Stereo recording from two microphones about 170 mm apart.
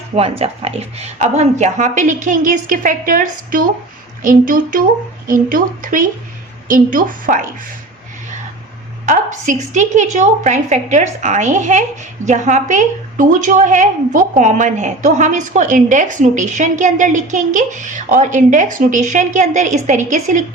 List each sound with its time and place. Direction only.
0.2 s a woman's voice: 35° right (ahead or behind); by 7.5 s 50° right (ahead or behind)
9.0 s a woman's voice: 45° right (ahead or behind)